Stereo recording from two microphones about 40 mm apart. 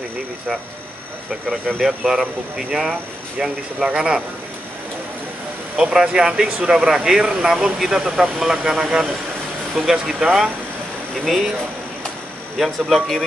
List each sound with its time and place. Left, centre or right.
1.8 s speech: centre
5.8 s speech: centre
12.5 s speech: centre